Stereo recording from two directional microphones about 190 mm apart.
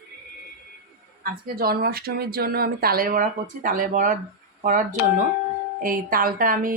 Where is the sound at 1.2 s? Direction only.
50° right (ahead or behind).